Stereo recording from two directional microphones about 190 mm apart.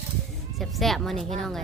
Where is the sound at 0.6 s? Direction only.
Centre (ahead or behind).